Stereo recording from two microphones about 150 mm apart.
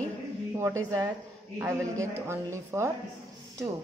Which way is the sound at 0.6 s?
20° right (ahead or behind).